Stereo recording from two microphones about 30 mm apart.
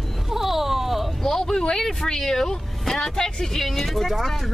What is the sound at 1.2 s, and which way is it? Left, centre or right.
Speech, centre.